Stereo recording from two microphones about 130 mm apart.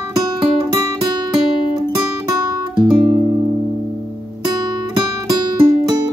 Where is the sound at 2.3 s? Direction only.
30° right (ahead or behind).